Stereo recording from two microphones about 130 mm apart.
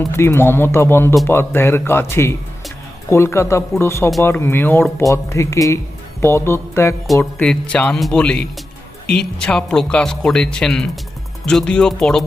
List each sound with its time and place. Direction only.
0.1 s speech: 20° left (ahead or behind); by 12.2 s 5° left (ahead or behind)